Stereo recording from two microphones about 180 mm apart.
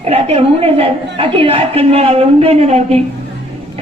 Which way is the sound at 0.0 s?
35° right (ahead or behind).